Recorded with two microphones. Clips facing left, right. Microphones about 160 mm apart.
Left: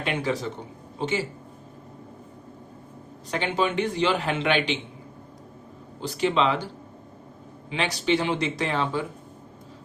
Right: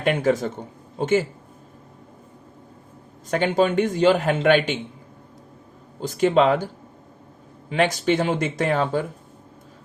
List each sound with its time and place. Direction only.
0.0 s a man's voice: 50° right (ahead or behind)
3.2 s a man's voice: 45° right (ahead or behind)
6.0 s a man's voice: 45° right (ahead or behind)
7.7 s a man's voice: 50° right (ahead or behind)